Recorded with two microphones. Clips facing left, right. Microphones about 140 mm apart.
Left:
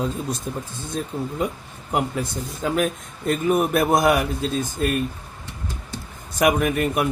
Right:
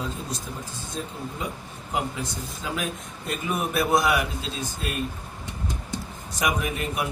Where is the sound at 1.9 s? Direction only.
55° left (ahead or behind).